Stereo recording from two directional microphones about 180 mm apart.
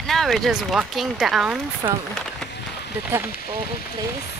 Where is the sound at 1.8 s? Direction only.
15° right (ahead or behind).